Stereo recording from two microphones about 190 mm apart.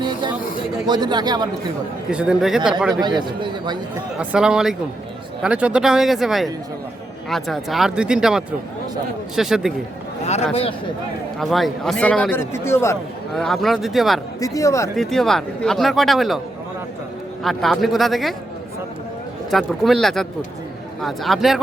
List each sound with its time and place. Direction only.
0.0 s a sound: 25° right (ahead or behind)
0.9 s a man's voice: 20° right (ahead or behind)
2.0 s speech: 5° right (ahead or behind)
2.9 s a man's voice: 25° right (ahead or behind)
4.2 s speech: 5° right (ahead or behind)
10.5 s speech: 30° left (ahead or behind)
11.3 s speech: centre (ahead or behind)
13.3 s speech: centre (ahead or behind)
14.4 s speech: 15° left (ahead or behind)
14.9 s speech: centre (ahead or behind)
17.4 s speech: centre (ahead or behind)
19.5 s speech: centre (ahead or behind)